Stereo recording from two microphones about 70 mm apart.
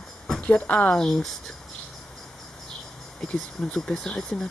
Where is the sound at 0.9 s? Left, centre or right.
Centre.